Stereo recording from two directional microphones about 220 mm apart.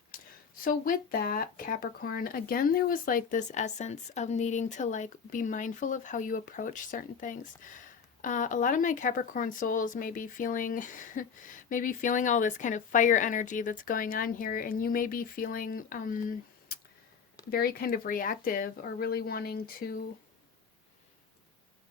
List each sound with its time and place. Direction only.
0.6 s speech: 40° left (ahead or behind)
17.5 s speech: 45° left (ahead or behind)